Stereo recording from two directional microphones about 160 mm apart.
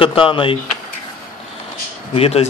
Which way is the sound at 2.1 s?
40° left (ahead or behind).